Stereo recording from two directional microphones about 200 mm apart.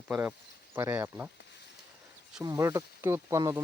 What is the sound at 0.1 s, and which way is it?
Speech, 10° right (ahead or behind).